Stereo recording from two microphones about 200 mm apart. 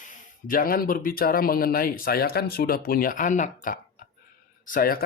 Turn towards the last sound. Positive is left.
turn(degrees=45)  # may be behind; listen again after turning